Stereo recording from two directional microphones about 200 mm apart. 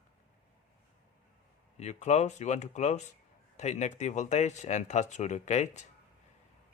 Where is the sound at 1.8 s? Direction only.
35° left (ahead or behind).